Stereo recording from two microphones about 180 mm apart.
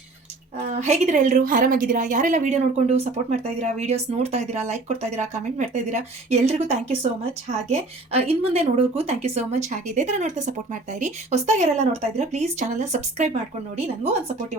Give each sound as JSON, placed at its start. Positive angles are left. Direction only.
{"t": 0.8, "sound": "a woman's voice", "side_deg": -40}